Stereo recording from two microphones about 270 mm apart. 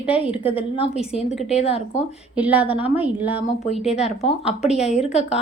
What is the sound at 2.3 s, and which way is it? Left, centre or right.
A woman's voice, centre.